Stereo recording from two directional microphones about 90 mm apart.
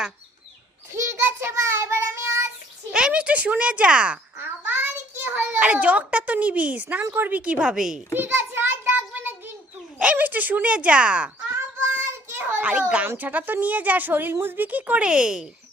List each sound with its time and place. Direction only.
0.9 s child singing: 30° right (ahead or behind)
2.9 s a child's voice: 10° right (ahead or behind)
4.4 s a child's voice: 25° right (ahead or behind); by 8.0 s 10° right (ahead or behind)
8.1 s child singing: 25° right (ahead or behind)
10.0 s a child's voice: 15° right (ahead or behind)
11.5 s child singing: 25° right (ahead or behind)
13.1 s a child's voice: 20° right (ahead or behind)